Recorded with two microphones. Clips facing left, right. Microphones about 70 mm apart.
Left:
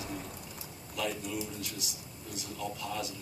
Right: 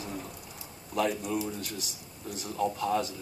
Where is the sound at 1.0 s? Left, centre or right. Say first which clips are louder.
Right 6 dB; right.